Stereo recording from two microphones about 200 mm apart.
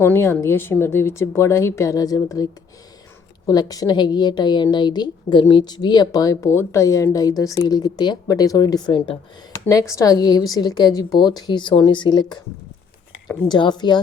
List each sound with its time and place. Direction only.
0.0 s a woman's voice: 10° left (ahead or behind)
13.5 s a woman's voice: 20° left (ahead or behind)